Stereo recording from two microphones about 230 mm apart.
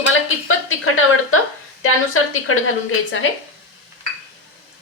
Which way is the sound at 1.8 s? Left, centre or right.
Left.